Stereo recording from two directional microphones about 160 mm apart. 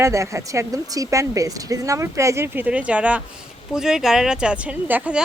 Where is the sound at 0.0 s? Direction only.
20° right (ahead or behind).